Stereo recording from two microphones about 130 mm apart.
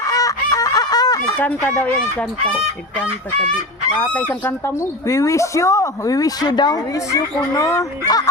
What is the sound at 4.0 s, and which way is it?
Speech, 15° left (ahead or behind).